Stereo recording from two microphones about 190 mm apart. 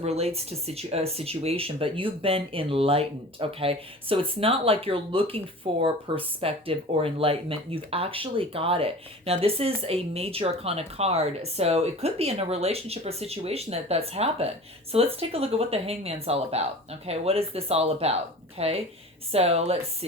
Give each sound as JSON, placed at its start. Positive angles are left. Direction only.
{"t": 0.0, "sound": "speech", "side_deg": -35}